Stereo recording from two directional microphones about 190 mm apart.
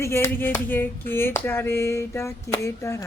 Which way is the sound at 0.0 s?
15° left (ahead or behind).